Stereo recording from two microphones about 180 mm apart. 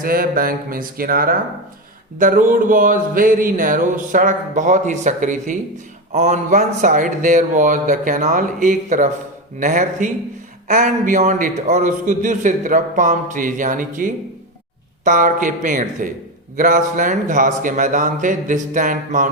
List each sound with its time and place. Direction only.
0.0 s a man's voice: 55° right (ahead or behind)